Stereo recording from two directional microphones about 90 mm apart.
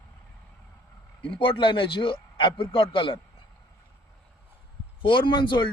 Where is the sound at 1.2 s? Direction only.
70° left (ahead or behind).